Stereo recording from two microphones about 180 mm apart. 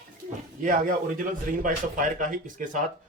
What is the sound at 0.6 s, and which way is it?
A man's voice, 45° right (ahead or behind).